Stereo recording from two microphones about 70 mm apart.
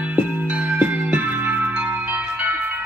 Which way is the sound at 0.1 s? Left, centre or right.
Right.